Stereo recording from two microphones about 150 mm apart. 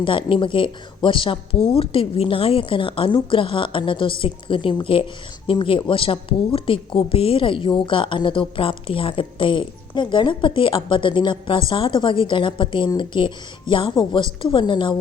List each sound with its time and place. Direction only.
0.0 s speech: 35° left (ahead or behind)